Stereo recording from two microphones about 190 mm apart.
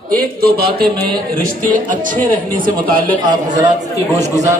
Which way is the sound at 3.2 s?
20° right (ahead or behind).